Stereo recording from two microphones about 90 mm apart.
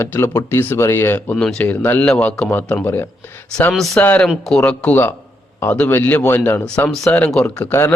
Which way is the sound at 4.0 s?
15° left (ahead or behind).